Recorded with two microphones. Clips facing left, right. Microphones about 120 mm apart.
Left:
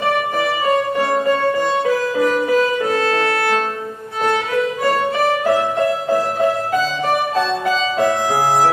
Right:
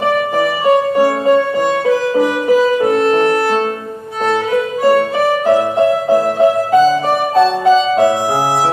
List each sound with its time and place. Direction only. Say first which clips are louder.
2.5 s music: right 5 dB; 15° right (ahead or behind)
5.5 s music: right 5 dB; 30° right (ahead or behind)